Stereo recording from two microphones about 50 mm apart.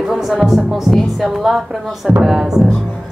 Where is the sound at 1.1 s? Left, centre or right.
Centre.